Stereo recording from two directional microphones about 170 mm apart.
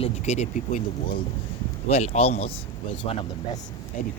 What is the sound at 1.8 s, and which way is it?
Speech, 35° left (ahead or behind).